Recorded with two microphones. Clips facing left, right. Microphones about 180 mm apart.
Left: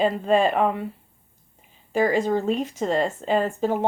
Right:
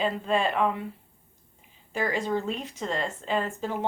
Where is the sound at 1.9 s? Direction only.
45° left (ahead or behind).